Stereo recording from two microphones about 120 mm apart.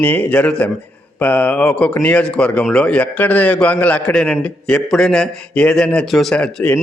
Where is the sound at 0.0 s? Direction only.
15° left (ahead or behind).